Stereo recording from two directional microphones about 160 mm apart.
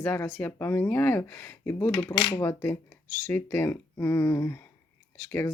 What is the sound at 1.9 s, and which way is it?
Mechanisms, 25° left (ahead or behind).